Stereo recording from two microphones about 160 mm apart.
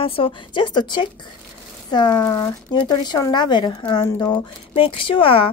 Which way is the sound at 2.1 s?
10° left (ahead or behind).